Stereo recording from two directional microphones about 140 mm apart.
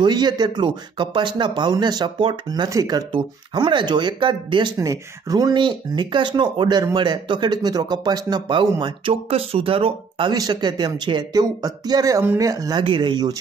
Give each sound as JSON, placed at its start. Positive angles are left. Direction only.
{"t": 0.0, "sound": "speech", "side_deg": -30}
{"t": 4.7, "sound": "speech", "side_deg": -25}
{"t": 10.3, "sound": "speech", "side_deg": -30}